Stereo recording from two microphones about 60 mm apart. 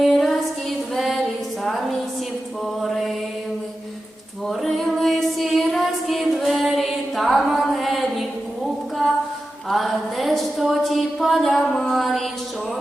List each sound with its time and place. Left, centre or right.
0.0 s a sound: centre
0.9 s music: centre
2.8 s mantra: centre
4.4 s female singing: centre
7.7 s music: centre
8.6 s a sound: centre